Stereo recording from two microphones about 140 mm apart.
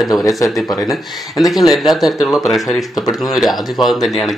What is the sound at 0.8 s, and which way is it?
Speech, centre (ahead or behind).